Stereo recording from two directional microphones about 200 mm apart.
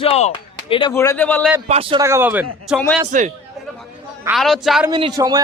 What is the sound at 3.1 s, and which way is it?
Speech, 40° right (ahead or behind).